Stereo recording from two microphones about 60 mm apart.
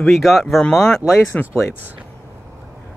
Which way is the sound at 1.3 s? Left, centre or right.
Left.